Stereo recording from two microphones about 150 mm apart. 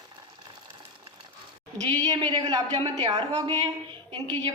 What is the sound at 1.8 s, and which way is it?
A woman's voice, 30° right (ahead or behind).